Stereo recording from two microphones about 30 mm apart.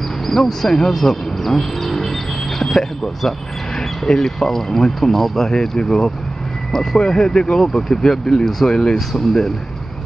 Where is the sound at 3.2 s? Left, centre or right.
Centre.